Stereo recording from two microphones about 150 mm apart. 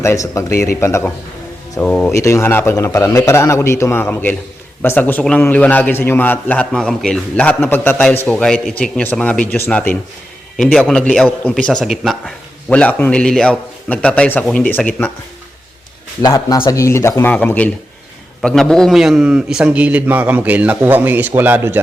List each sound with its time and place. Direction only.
0.0 s a man's voice: 20° left (ahead or behind)
16.3 s a man's voice: 20° left (ahead or behind); by 21.8 s 15° right (ahead or behind)